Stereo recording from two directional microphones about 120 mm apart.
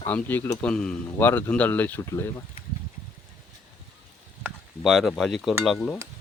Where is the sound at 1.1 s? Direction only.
20° left (ahead or behind).